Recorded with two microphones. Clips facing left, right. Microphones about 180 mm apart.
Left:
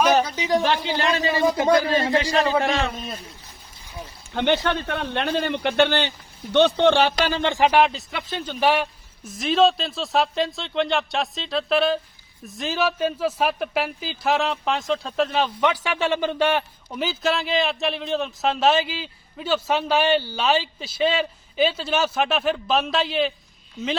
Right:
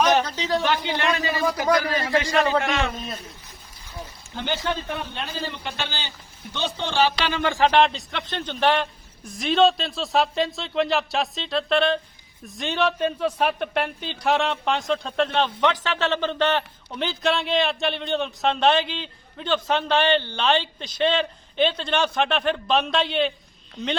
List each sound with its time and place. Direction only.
0.3 s a man's voice: 10° left (ahead or behind)
0.6 s a man's voice: 30° left (ahead or behind)
4.4 s a man's voice: 65° left (ahead or behind)
7.4 s a man's voice: 20° left (ahead or behind)
7.7 s a man's voice: 5° left (ahead or behind)